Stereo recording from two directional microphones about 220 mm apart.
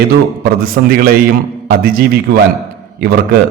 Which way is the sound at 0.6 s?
40° right (ahead or behind).